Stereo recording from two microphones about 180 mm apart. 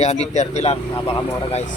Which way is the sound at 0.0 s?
35° left (ahead or behind).